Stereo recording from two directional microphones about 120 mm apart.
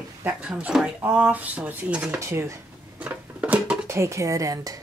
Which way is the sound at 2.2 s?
25° right (ahead or behind).